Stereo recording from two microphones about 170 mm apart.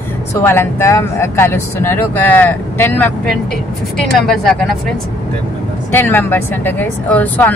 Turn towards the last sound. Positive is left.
turn(degrees=10)  # may be behind; listen again after turning